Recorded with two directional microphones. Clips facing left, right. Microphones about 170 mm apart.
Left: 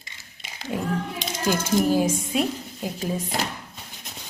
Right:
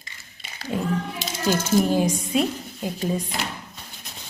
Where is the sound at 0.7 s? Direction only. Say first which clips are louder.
Right 1 dB; 10° left (ahead or behind).